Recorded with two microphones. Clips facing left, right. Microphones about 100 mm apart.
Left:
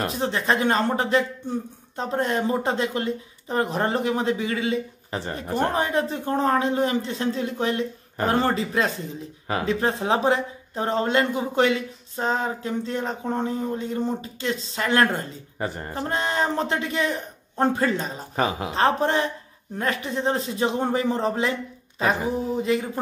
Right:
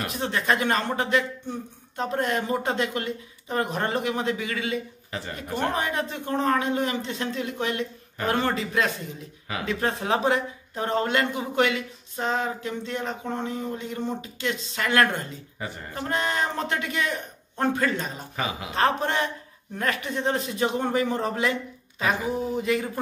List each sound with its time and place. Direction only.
0.0 s speech: 30° left (ahead or behind)